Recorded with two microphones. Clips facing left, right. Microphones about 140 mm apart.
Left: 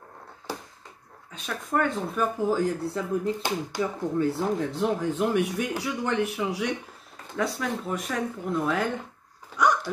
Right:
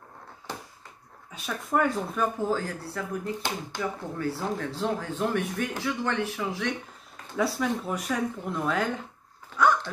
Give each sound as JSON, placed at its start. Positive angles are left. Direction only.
{"t": 1.3, "sound": "speech", "side_deg": -5}
{"t": 2.5, "sound": "speech", "side_deg": 20}
{"t": 7.6, "sound": "speech", "side_deg": -5}
{"t": 9.6, "sound": "hiccup", "side_deg": 15}